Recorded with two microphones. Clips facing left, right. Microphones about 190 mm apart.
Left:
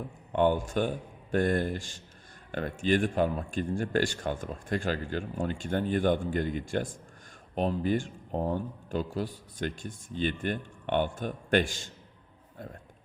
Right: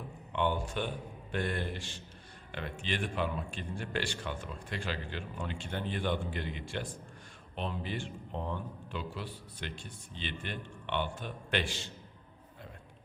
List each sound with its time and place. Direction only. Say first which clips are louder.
0.3 s speech: left 7 dB; 45° left (ahead or behind)